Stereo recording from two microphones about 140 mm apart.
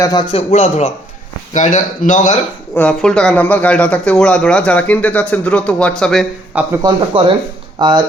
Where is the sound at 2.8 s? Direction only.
5° left (ahead or behind).